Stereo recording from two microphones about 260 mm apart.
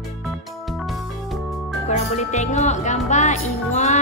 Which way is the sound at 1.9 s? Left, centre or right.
Left.